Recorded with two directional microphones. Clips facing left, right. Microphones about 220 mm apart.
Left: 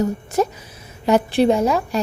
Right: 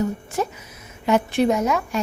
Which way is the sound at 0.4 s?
40° left (ahead or behind).